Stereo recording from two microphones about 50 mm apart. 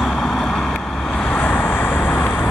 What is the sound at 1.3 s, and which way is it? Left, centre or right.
Vehicle, left.